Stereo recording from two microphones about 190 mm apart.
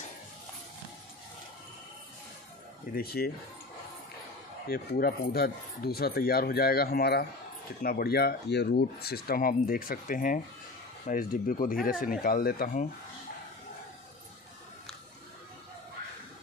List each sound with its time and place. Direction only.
2.9 s speech: 55° left (ahead or behind)
4.6 s speech: 55° left (ahead or behind)